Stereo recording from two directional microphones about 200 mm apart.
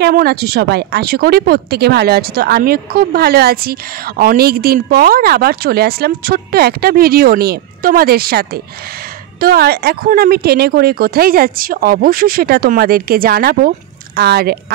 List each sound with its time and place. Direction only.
0.0 s speech: 50° right (ahead or behind)